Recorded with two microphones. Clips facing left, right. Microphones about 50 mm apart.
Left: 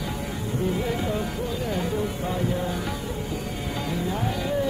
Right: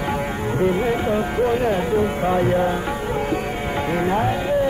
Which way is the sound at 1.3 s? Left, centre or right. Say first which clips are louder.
Right 9 dB; right.